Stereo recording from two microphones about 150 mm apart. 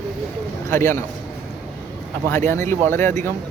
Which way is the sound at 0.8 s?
15° left (ahead or behind).